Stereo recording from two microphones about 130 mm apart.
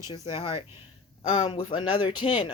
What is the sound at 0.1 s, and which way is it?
A woman's voice, 40° left (ahead or behind).